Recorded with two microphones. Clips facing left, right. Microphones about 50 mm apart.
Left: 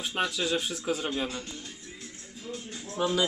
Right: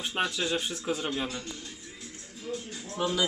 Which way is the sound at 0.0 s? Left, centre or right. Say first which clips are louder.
Even; centre.